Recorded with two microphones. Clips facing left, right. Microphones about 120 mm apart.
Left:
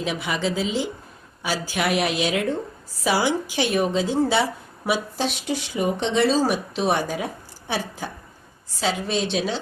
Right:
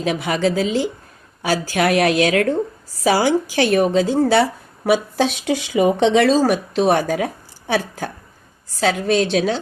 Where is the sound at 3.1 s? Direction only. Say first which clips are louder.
Right 5 dB; 90° right.